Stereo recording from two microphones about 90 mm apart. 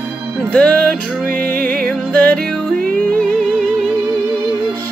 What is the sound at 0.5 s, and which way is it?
Music, 15° left (ahead or behind).